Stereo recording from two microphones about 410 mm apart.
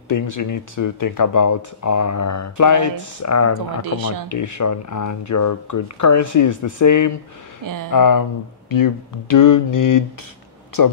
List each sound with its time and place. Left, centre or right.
0.1 s speech: left
3.8 s speech: right
4.3 s speech: left
7.6 s speech: right
7.9 s speech: left